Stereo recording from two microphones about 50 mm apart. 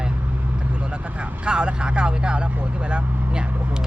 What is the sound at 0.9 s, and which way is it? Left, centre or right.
Speech, centre.